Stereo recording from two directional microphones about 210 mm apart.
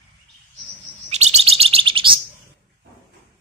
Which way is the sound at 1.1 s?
30° right (ahead or behind).